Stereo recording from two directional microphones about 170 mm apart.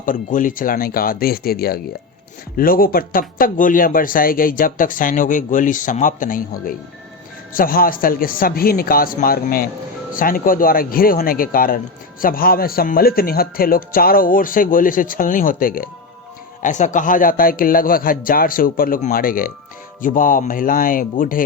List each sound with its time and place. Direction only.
0.0 s speech: 50° left (ahead or behind)
16.6 s speech: 45° left (ahead or behind)